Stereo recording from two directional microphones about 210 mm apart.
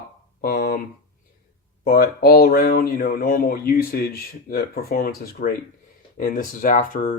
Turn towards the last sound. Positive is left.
turn(degrees=40)  # may be behind; listen again after turning